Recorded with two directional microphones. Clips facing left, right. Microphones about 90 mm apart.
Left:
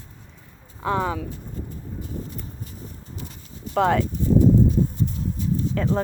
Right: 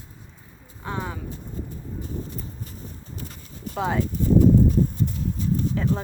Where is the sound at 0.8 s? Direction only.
90° left.